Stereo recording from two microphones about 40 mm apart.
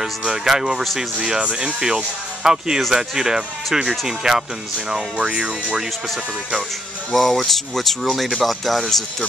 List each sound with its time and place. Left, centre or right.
0.5 s speech: centre
7.2 s speech: centre